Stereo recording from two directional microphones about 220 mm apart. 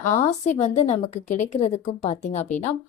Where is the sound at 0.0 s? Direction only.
30° left (ahead or behind).